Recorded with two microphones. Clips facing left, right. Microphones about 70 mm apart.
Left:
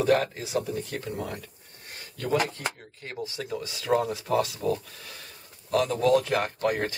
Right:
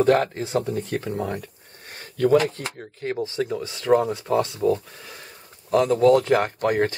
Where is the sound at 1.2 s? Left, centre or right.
Right.